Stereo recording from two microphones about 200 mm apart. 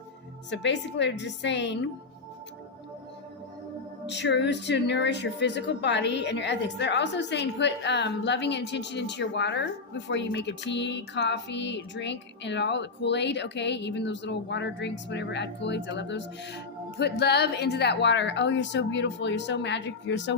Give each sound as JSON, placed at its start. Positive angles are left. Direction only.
{"t": 0.5, "sound": "music", "side_deg": 60}
{"t": 4.0, "sound": "music", "side_deg": 60}